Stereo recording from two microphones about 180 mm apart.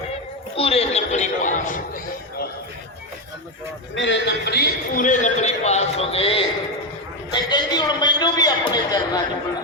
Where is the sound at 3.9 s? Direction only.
90° left; by 9.2 s 20° left (ahead or behind).